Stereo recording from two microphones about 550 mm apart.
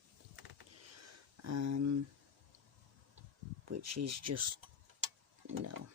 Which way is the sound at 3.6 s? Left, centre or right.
Right.